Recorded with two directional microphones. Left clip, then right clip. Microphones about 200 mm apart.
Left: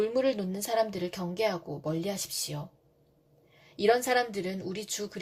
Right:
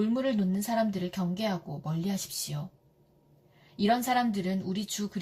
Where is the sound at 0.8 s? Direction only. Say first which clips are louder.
Left 3 dB; 35° left (ahead or behind).